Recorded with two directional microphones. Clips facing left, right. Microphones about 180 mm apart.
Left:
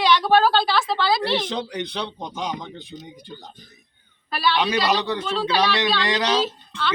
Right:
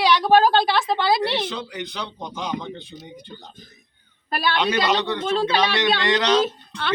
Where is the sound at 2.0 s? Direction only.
20° left (ahead or behind).